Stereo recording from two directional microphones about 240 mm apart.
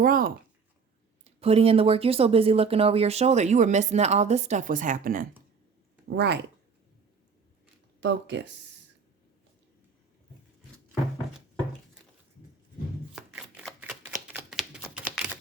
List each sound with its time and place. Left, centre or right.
0.0 s speech: right
1.2 s speech: right
8.0 s speech: right
13.1 s typewriter: centre